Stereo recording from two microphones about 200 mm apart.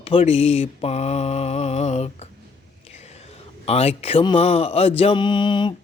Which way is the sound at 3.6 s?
30° left (ahead or behind).